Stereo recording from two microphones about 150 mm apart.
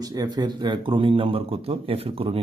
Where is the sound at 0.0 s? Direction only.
25° right (ahead or behind).